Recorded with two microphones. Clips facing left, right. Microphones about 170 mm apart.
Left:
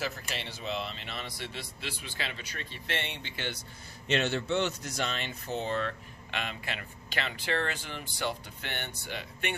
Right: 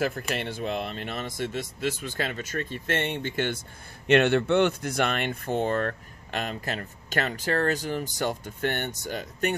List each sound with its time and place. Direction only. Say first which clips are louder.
0.2 s speech: right 9 dB; 55° right (ahead or behind)